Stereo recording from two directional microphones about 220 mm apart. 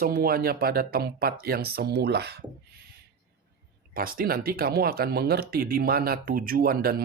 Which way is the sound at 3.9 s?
40° right (ahead or behind).